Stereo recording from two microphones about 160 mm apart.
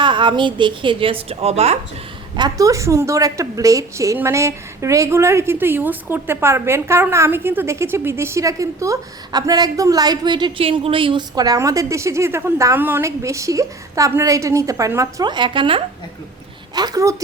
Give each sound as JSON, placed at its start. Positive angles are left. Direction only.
{"t": 0.0, "sound": "a woman's voice", "side_deg": -30}
{"t": 2.3, "sound": "a woman's voice", "side_deg": -25}